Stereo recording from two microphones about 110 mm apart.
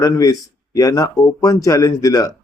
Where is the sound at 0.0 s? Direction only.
35° left (ahead or behind).